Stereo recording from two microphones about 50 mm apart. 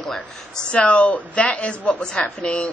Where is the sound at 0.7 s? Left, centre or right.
Left.